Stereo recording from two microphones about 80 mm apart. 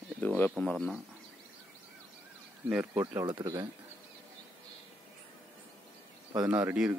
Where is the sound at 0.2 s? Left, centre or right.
Centre.